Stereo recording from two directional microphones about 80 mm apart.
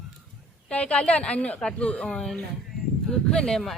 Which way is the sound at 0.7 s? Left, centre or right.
Centre.